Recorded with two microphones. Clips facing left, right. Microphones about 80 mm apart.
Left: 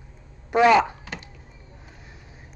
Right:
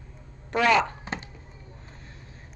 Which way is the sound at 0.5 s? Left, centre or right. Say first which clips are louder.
Left 5 dB; centre.